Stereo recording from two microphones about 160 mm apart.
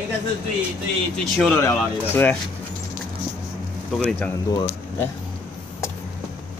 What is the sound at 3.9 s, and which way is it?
Speech, 5° left (ahead or behind).